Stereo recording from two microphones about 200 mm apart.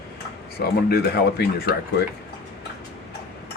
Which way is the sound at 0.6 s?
50° left (ahead or behind).